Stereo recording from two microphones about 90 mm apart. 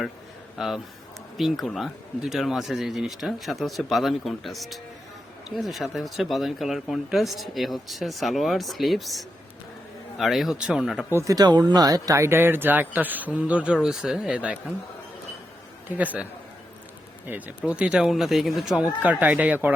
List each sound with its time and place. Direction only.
0.5 s speech: centre (ahead or behind)
11.1 s speech: 30° right (ahead or behind)
11.3 s speech: 50° right (ahead or behind); by 14.6 s 10° right (ahead or behind)
16.0 s speech: 15° right (ahead or behind)
17.2 s speech: 20° right (ahead or behind); by 18.8 s centre (ahead or behind)
19.2 s speech: 15° right (ahead or behind)